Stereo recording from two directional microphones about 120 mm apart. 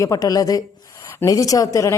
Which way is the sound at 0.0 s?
30° left (ahead or behind).